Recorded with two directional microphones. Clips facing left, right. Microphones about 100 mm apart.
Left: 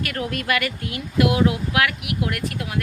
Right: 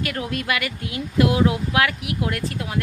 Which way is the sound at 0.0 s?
20° right (ahead or behind).